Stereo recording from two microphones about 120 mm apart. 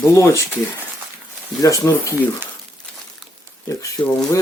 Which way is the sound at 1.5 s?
30° left (ahead or behind).